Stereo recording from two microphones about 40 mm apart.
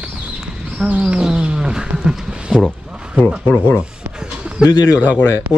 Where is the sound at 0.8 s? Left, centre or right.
Right.